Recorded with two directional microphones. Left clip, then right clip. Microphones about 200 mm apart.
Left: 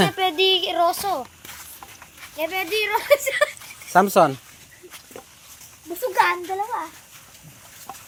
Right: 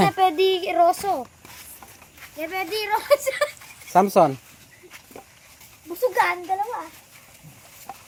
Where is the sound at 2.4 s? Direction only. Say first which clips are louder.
Left 4 dB; 50° right (ahead or behind).